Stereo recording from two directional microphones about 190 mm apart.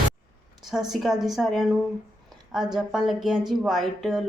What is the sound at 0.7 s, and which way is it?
Speech, centre (ahead or behind).